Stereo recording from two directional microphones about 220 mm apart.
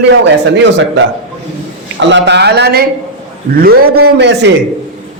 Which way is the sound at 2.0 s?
55° right (ahead or behind).